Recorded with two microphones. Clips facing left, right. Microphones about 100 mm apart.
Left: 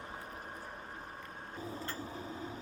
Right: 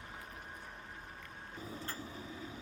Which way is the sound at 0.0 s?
40° left (ahead or behind).